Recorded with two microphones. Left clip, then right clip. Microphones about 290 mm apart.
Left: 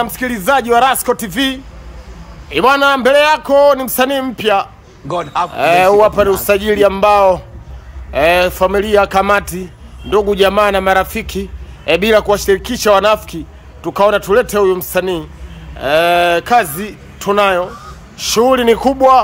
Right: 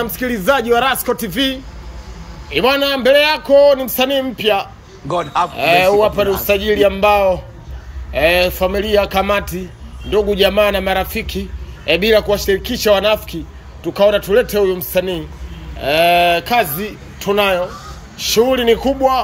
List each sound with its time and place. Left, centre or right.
0.0 s a man's voice: centre
5.0 s a man's voice: centre
5.5 s a man's voice: centre